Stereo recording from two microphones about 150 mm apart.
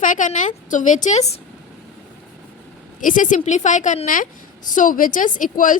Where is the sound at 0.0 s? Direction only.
60° left (ahead or behind).